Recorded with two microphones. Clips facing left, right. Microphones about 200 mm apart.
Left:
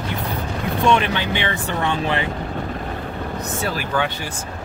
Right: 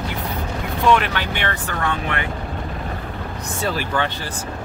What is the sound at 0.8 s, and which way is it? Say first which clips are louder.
Speech: right 1 dB; 20° left (ahead or behind).